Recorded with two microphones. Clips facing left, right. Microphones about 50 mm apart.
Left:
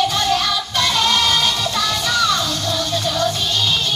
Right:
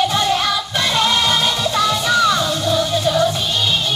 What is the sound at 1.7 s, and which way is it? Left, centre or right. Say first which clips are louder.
Music: right 7 dB; centre.